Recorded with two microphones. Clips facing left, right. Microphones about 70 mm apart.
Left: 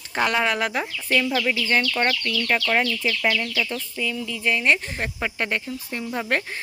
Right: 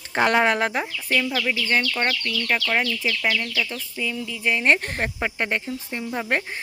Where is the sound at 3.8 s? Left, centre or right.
Centre.